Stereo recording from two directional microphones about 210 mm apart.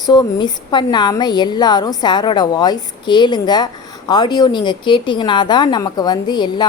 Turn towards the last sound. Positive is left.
turn(degrees=20)  # may be behind; listen again after turning